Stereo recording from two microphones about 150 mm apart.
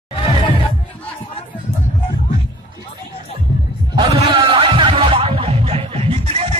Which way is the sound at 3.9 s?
35° right (ahead or behind).